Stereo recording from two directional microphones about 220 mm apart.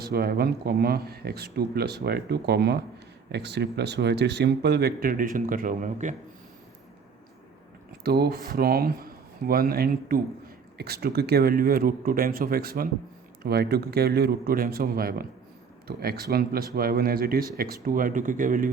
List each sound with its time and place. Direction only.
0.0 s speech: 45° right (ahead or behind)
8.0 s speech: 45° right (ahead or behind)